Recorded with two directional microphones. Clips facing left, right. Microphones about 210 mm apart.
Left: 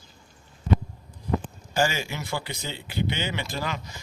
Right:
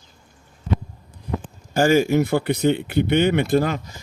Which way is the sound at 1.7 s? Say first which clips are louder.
Right 10 dB; 50° right (ahead or behind).